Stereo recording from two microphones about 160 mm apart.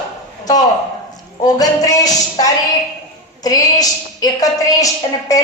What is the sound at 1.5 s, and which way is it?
A man's voice, 20° left (ahead or behind).